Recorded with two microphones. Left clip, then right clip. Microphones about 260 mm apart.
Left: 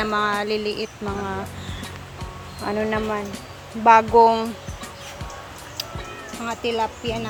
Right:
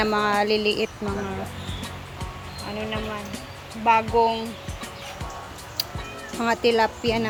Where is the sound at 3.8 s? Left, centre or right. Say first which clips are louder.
Left 6 dB; left.